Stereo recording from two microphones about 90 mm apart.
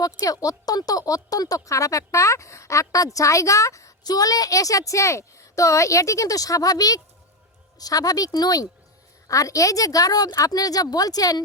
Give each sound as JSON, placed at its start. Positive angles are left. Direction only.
{"t": 0.0, "sound": "a woman's voice", "side_deg": 40}